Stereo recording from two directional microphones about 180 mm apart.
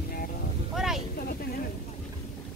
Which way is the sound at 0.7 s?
Centre (ahead or behind).